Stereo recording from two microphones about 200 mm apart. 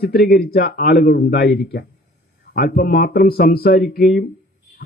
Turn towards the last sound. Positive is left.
turn(degrees=50)  # may be behind; listen again after turning